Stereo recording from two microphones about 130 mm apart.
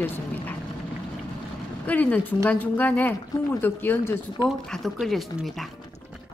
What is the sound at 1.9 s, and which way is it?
A woman's voice, 10° left (ahead or behind).